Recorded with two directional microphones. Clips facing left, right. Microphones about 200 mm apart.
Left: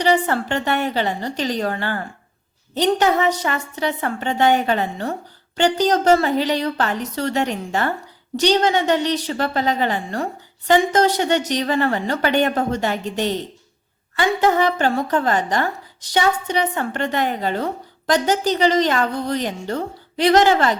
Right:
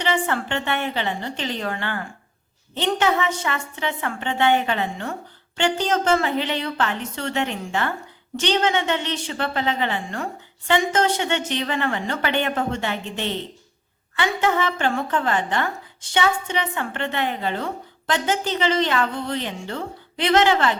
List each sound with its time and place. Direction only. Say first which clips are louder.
0.0 s a woman's voice: left 5 dB; 40° left (ahead or behind)